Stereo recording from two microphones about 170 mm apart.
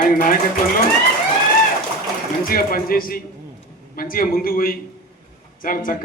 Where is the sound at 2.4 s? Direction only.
60° left (ahead or behind).